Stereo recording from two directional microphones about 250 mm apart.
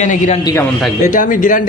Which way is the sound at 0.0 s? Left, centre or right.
Left.